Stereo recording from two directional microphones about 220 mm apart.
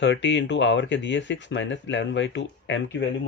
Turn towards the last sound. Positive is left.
turn(degrees=55)  # may be behind; listen again after turning